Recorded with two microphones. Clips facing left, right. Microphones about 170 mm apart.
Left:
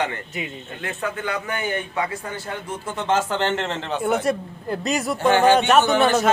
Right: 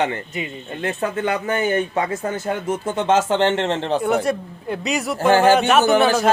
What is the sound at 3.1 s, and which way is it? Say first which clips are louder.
Speech: right 4 dB; 25° right (ahead or behind).